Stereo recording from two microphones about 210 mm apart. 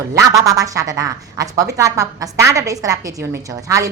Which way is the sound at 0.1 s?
15° right (ahead or behind).